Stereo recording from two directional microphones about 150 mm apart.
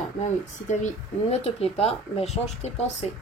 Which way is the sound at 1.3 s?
40° left (ahead or behind).